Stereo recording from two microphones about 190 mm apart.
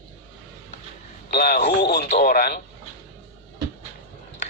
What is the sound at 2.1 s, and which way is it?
Speech, 45° left (ahead or behind).